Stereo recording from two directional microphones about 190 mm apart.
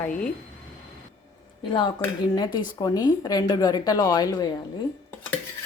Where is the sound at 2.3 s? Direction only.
20° left (ahead or behind).